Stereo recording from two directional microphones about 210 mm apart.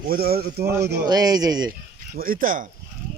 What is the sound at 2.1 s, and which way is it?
Speech, 45° right (ahead or behind).